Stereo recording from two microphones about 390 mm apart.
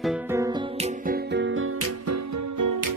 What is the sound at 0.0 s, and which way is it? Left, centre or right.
Music, centre.